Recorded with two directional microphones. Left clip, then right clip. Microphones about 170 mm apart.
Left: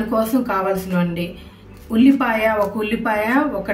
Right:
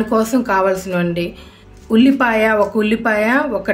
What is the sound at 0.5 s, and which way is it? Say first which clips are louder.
Speech: right 5 dB; 70° right (ahead or behind).